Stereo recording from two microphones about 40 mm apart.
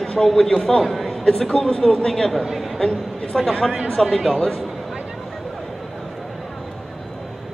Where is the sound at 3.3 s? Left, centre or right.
Centre.